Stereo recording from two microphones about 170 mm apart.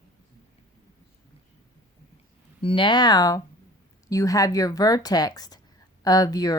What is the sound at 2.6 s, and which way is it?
A woman's voice, 30° left (ahead or behind).